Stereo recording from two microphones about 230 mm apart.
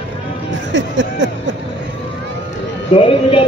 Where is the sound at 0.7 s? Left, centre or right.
Right.